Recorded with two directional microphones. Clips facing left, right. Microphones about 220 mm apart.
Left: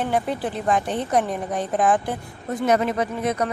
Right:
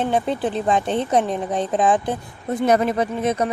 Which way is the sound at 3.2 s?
25° right (ahead or behind).